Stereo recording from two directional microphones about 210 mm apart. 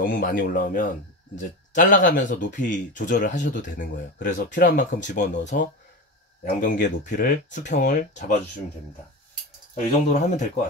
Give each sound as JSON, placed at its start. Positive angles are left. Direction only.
{"t": 0.0, "sound": "speech", "side_deg": 40}
{"t": 9.8, "sound": "speech", "side_deg": 35}